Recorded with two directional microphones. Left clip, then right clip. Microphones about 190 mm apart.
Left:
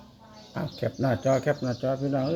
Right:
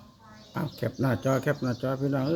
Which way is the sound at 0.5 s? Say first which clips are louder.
Left 1 dB; 25° right (ahead or behind).